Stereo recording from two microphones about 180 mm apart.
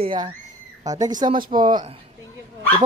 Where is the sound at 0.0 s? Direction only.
25° right (ahead or behind).